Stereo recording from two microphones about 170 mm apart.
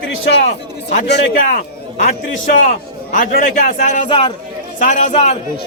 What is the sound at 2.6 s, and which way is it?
A man's voice, 50° left (ahead or behind).